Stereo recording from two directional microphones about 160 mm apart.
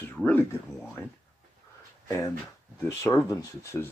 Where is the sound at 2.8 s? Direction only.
20° left (ahead or behind).